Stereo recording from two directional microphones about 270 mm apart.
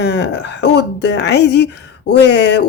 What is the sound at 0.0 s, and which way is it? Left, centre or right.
A woman's voice, left.